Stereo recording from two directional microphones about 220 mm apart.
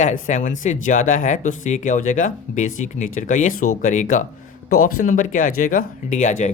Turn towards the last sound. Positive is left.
turn(degrees=35)  # may be behind; listen again after turning